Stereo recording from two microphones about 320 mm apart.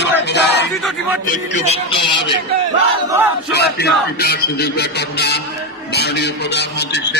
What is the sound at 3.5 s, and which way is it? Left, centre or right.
A man's voice, left.